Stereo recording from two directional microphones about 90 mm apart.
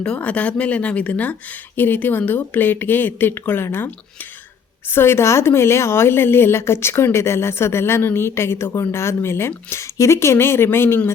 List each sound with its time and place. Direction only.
0.0 s a woman's voice: 10° left (ahead or behind)